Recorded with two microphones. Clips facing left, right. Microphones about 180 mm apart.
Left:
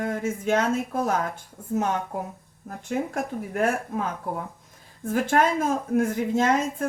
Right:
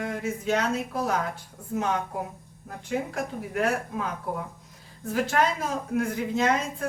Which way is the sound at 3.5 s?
50° left (ahead or behind).